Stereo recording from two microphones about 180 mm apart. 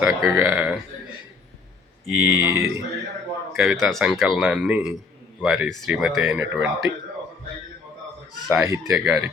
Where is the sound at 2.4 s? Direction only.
15° right (ahead or behind).